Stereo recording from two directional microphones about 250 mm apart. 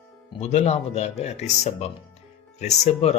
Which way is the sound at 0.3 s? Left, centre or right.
Left.